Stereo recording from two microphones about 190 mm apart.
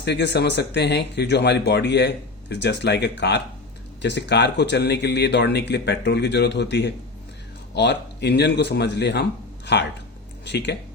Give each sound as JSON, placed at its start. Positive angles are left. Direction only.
{"t": 0.0, "sound": "speech", "side_deg": 65}